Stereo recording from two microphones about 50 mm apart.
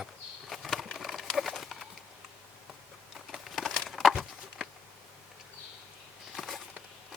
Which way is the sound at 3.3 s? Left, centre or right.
Centre.